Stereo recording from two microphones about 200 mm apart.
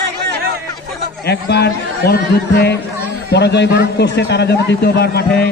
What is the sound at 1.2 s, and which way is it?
A man's voice, 55° left (ahead or behind).